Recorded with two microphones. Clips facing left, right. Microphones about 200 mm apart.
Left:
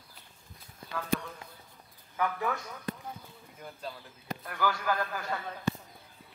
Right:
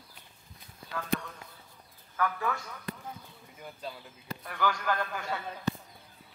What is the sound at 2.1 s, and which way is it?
Speech, 15° left (ahead or behind).